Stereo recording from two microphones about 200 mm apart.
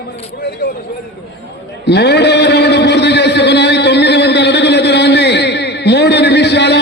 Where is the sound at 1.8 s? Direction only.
55° left (ahead or behind).